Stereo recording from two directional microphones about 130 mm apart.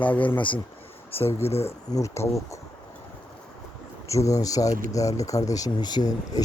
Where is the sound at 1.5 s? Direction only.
50° left (ahead or behind).